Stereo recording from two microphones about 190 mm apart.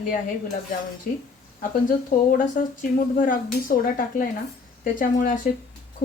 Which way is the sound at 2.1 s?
45° left (ahead or behind).